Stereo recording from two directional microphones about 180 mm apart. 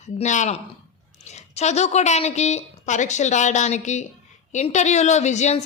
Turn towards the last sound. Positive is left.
turn(degrees=40)  # may be behind; listen again after turning